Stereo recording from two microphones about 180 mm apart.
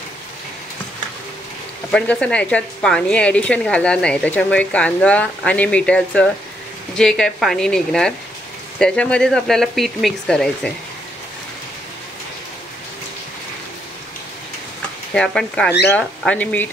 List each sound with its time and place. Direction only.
1.9 s a woman's voice: 5° left (ahead or behind)
15.1 s a woman's voice: 5° left (ahead or behind)